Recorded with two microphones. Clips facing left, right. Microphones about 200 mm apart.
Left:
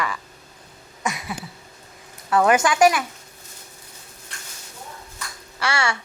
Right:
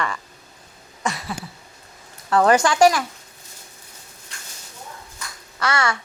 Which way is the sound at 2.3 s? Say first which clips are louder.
Right 1 dB; 15° left (ahead or behind).